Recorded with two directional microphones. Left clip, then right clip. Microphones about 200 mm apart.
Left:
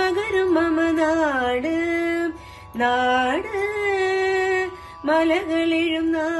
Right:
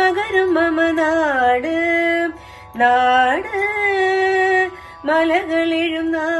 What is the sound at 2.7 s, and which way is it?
Music, 20° left (ahead or behind).